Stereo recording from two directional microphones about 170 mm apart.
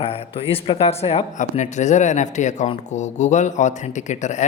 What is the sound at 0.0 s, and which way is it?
Speech, 35° left (ahead or behind).